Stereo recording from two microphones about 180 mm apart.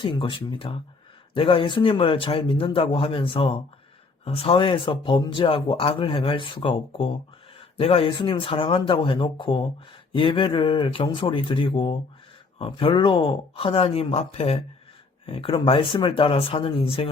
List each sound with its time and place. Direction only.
0.0 s speech: 25° left (ahead or behind)